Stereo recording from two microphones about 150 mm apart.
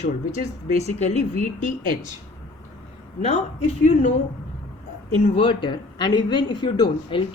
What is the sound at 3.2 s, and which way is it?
Speech, 40° left (ahead or behind).